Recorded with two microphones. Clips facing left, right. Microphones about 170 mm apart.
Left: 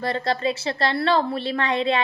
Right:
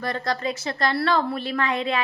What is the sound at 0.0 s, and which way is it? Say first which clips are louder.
A woman's voice: left 3 dB; 25° left (ahead or behind).